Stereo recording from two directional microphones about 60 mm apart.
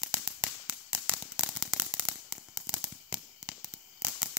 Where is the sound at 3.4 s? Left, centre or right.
Centre.